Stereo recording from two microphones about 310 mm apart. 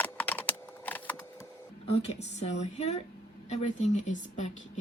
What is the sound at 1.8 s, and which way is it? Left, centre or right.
Speech, centre.